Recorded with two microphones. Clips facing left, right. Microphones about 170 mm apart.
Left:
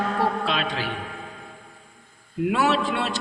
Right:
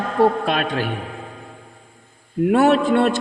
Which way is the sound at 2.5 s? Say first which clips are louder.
Right 8 dB; 50° right (ahead or behind).